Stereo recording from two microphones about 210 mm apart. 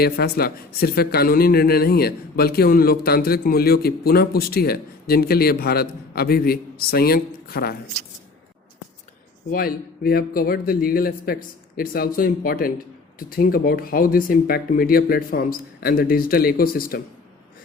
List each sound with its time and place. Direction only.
0.0 s speech: 50° left (ahead or behind)
9.5 s speech: 45° left (ahead or behind)